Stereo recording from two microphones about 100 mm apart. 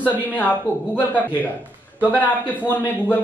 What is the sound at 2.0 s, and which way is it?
Speech, 15° right (ahead or behind).